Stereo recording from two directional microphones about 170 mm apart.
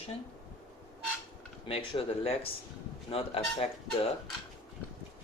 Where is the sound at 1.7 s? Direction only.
35° left (ahead or behind).